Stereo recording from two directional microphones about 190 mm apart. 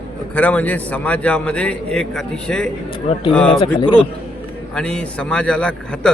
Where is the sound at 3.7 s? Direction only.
25° left (ahead or behind).